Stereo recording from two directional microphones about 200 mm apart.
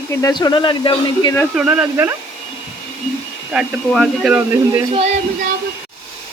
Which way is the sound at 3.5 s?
Centre (ahead or behind).